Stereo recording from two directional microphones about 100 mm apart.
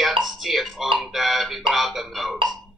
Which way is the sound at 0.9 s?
Centre (ahead or behind).